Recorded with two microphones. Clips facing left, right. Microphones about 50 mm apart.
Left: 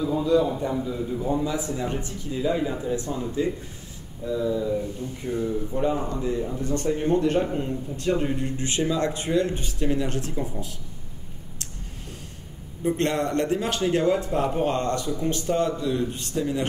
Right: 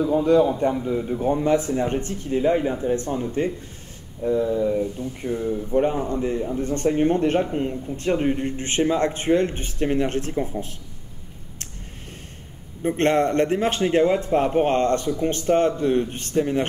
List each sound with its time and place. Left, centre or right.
0.0 s speech: right
5.4 s speech: right
12.8 s speech: right